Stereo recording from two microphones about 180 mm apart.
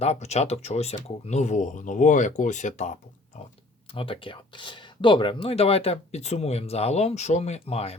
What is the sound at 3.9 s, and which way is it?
Speech, 30° left (ahead or behind).